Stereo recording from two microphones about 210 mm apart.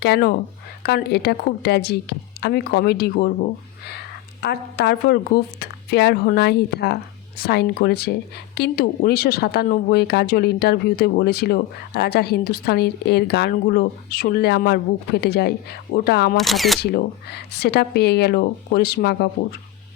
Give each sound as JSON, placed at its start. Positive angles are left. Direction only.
{"t": 0.0, "sound": "speech", "side_deg": 50}
{"t": 4.4, "sound": "speech", "side_deg": 50}
{"t": 16.4, "sound": "speech", "side_deg": 0}
{"t": 16.8, "sound": "speech", "side_deg": 50}